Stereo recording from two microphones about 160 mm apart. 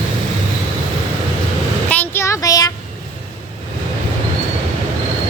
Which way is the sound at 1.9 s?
15° left (ahead or behind).